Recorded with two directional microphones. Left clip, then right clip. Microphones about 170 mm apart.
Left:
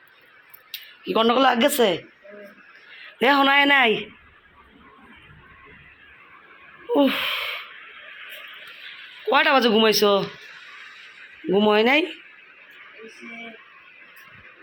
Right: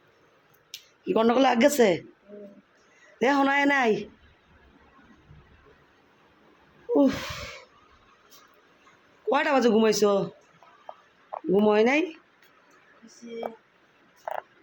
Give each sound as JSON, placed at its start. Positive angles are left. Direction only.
{"t": 1.0, "sound": "a man's voice", "side_deg": -20}
{"t": 3.2, "sound": "a man's voice", "side_deg": -10}
{"t": 6.9, "sound": "a sound", "side_deg": -15}
{"t": 9.3, "sound": "a man's voice", "side_deg": -10}
{"t": 11.5, "sound": "speech", "side_deg": 0}